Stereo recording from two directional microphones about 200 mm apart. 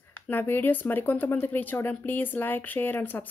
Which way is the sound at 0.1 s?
10° left (ahead or behind).